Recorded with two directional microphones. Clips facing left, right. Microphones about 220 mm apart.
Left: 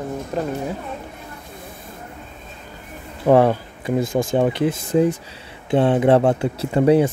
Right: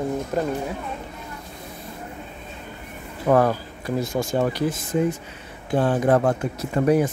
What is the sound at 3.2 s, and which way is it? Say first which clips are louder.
Speech: left 4 dB; 25° left (ahead or behind).